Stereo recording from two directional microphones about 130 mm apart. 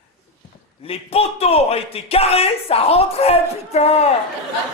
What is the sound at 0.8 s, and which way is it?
Speech, 50° left (ahead or behind).